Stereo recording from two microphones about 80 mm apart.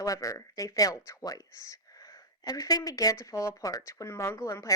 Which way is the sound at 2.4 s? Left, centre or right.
Left.